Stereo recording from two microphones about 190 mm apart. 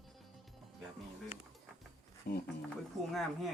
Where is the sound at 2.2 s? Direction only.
50° left (ahead or behind).